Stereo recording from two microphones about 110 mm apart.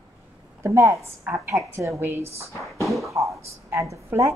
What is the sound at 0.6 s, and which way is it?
A woman's voice, 25° right (ahead or behind).